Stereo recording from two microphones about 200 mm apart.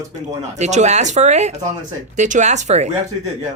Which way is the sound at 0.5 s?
35° right (ahead or behind).